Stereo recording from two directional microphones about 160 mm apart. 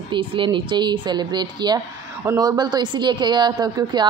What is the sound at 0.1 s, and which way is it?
A woman's voice, 35° right (ahead or behind).